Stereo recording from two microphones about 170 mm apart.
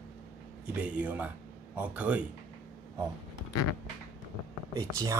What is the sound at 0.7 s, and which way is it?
Speech, 5° right (ahead or behind).